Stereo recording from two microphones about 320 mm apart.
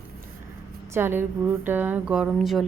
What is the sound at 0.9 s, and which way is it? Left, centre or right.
Speech, centre.